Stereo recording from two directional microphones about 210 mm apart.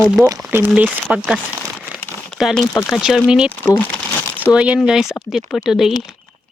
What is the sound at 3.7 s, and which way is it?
Crumpling, 10° left (ahead or behind).